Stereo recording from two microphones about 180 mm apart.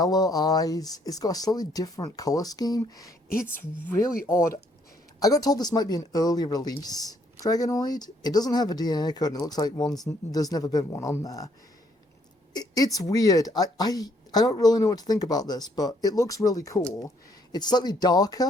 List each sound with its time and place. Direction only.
0.0 s a woman's voice: 20° left (ahead or behind)
12.5 s a woman's voice: 20° left (ahead or behind)